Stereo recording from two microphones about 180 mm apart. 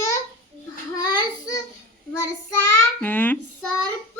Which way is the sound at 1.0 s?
20° left (ahead or behind).